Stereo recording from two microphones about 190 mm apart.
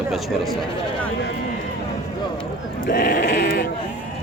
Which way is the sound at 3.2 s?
60° left (ahead or behind).